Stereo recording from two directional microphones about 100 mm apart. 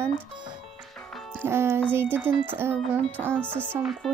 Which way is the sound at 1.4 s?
25° right (ahead or behind).